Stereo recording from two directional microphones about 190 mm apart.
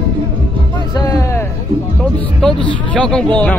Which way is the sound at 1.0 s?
20° left (ahead or behind).